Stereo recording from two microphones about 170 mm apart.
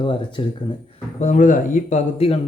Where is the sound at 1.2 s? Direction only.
50° left (ahead or behind).